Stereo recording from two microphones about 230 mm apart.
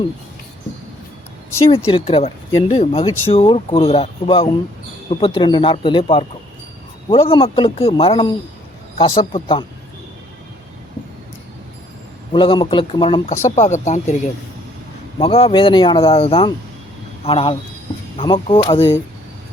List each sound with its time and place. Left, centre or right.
1.9 s speech: left
12.3 s speech: left
15.2 s speech: left